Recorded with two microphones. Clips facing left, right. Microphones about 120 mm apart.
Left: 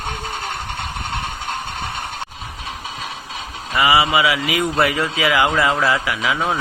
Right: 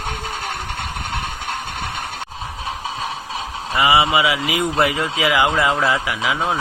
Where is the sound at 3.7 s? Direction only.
25° right (ahead or behind).